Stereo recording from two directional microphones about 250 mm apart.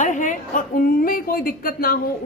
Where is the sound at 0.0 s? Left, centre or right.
Left.